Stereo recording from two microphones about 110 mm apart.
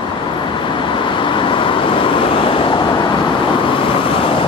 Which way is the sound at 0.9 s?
50° left (ahead or behind).